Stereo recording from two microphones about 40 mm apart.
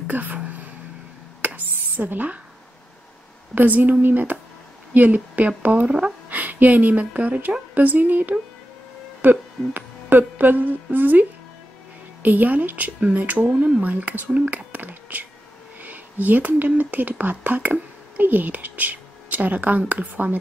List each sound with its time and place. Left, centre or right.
0.0 s a sound: right
2.0 s speech: right
3.5 s a woman's voice: right
5.9 s speech: right
6.2 s speech: right
9.2 s a sound: right
12.2 s speech: right
14.3 s whispering: right
15.8 s speech: right